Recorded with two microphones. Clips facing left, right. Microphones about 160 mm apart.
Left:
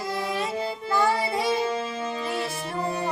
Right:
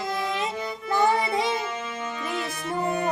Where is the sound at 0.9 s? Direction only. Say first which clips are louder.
Right 2 dB; 20° right (ahead or behind).